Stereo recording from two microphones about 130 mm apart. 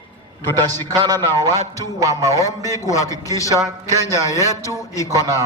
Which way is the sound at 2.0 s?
25° right (ahead or behind).